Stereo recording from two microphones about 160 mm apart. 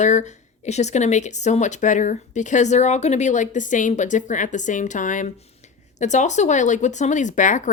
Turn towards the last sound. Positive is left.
turn(degrees=50)  # may be behind; listen again after turning